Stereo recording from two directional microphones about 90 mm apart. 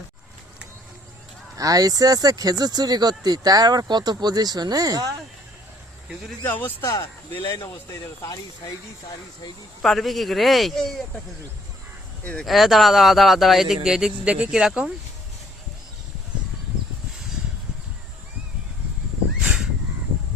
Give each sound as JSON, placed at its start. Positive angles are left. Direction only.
{"t": 1.5, "sound": "speech", "side_deg": -40}
{"t": 6.4, "sound": "speech", "side_deg": 20}
{"t": 6.8, "sound": "speech", "side_deg": 35}
{"t": 9.8, "sound": "speech", "side_deg": 0}
{"t": 12.2, "sound": "speech", "side_deg": 15}
{"t": 12.5, "sound": "speech", "side_deg": 0}